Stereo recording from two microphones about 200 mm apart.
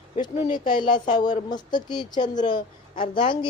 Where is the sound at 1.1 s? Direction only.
20° left (ahead or behind).